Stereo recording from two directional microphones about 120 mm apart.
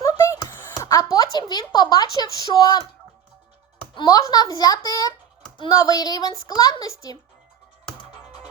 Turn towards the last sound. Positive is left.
turn(degrees=25)  # may be behind; listen again after turning